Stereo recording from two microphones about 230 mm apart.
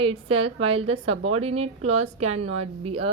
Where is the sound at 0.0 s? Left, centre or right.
Right.